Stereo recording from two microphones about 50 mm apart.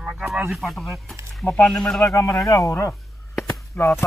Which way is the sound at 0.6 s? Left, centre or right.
Centre.